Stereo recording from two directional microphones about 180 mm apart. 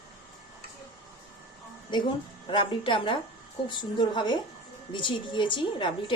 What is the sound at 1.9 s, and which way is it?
A woman's voice, 25° left (ahead or behind).